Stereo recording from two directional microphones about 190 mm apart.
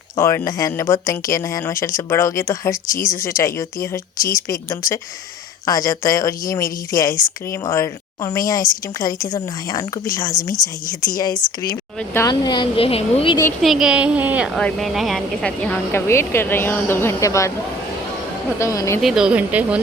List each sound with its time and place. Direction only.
0.2 s speech: 15° left (ahead or behind)
13.6 s a woman's voice: centre (ahead or behind); by 17.5 s 15° left (ahead or behind)
18.6 s speech: 15° left (ahead or behind)
19.0 s speech: 5° right (ahead or behind)